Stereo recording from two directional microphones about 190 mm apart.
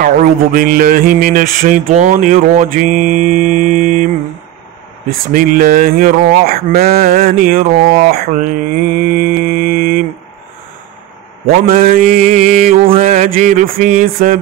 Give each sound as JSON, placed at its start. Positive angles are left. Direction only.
{"t": 0.0, "sound": "speech", "side_deg": -45}
{"t": 1.9, "sound": "mantra", "side_deg": -40}
{"t": 5.3, "sound": "speech", "side_deg": -45}
{"t": 9.5, "sound": "music", "side_deg": -45}
{"t": 11.6, "sound": "speech", "side_deg": -45}